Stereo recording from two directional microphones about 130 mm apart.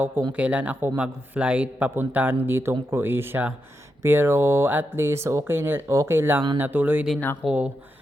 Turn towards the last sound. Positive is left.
turn(degrees=-10)  # may be behind; listen again after turning